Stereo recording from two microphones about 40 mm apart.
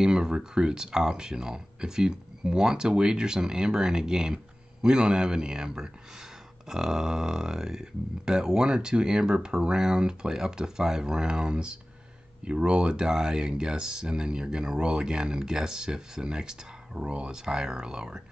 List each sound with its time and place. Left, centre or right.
0.0 s a man's voice: centre